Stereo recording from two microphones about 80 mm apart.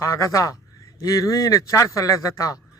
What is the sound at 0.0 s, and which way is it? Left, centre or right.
A man's voice, left.